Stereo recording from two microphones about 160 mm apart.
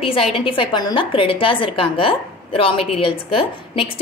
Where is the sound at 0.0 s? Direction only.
35° left (ahead or behind).